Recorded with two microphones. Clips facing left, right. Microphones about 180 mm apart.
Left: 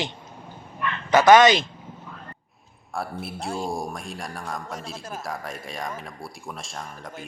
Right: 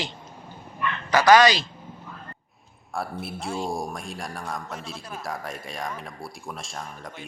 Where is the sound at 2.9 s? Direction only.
Centre (ahead or behind).